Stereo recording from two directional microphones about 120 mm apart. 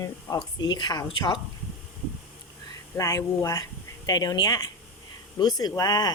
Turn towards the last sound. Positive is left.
turn(degrees=35)  # may be behind; listen again after turning